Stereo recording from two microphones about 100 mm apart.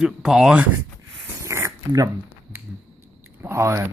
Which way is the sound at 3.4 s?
25° right (ahead or behind).